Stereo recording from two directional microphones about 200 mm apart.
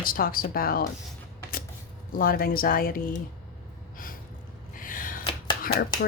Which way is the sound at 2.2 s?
45° left (ahead or behind).